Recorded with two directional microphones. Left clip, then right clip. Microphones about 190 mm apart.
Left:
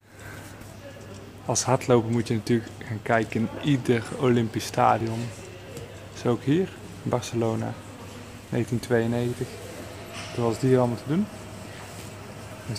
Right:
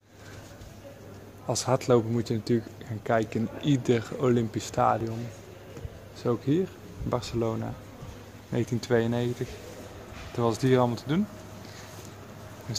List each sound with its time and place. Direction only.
1.5 s speech: 10° right (ahead or behind)
6.2 s speech: 5° right (ahead or behind)
8.5 s speech: 15° right (ahead or behind)
10.4 s speech: 25° right (ahead or behind)